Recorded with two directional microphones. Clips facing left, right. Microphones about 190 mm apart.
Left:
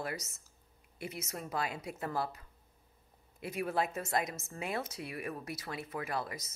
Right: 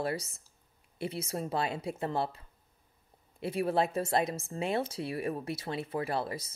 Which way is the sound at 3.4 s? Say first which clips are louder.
Right 5 dB; 30° right (ahead or behind).